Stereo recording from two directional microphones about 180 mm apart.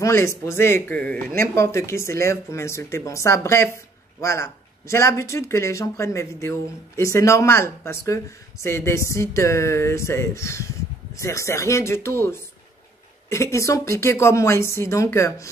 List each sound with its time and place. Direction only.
0.0 s speech: 15° left (ahead or behind)